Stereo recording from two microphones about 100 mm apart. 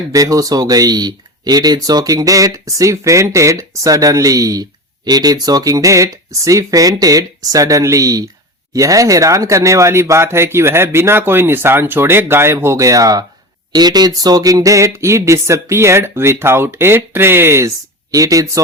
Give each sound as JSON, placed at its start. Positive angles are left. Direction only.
{"t": 0.1, "sound": "speech", "side_deg": -35}